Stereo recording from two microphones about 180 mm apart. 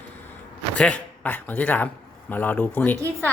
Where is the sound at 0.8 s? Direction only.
5° left (ahead or behind).